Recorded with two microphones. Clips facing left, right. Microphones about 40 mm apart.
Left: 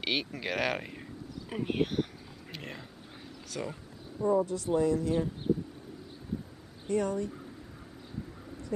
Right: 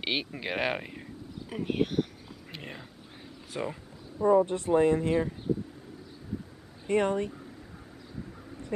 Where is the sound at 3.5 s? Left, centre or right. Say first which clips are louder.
Right 3 dB; centre.